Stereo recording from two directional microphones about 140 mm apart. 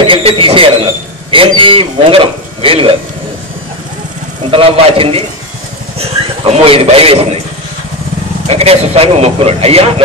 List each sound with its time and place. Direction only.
0.0 s speech: 40° right (ahead or behind)
4.5 s a man's voice: 40° right (ahead or behind)
8.5 s speech: 45° right (ahead or behind)